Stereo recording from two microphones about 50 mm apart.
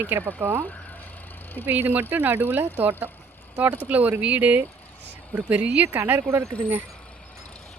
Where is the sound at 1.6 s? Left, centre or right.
Right.